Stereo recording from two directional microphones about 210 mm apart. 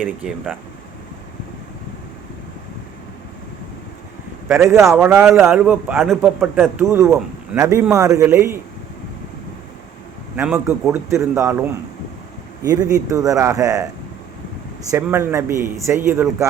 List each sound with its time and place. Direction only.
0.0 s a man's voice: 5° right (ahead or behind)
4.4 s speech: 15° right (ahead or behind)
4.9 s a man's voice: centre (ahead or behind)
6.7 s speech: 15° right (ahead or behind)
10.3 s speech: 5° right (ahead or behind)
14.8 s speech: 10° right (ahead or behind)